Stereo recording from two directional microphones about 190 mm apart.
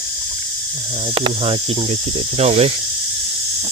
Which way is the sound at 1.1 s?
30° right (ahead or behind).